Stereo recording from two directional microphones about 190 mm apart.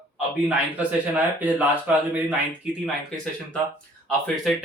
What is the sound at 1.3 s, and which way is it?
Speech, 10° right (ahead or behind).